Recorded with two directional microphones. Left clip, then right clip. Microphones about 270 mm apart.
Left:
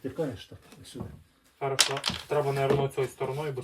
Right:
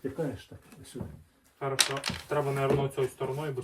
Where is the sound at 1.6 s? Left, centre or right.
Centre.